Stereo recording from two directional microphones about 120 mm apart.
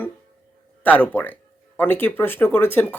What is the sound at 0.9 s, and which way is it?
Speech, 15° left (ahead or behind).